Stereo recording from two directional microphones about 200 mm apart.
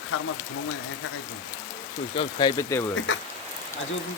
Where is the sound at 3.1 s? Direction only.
65° left (ahead or behind).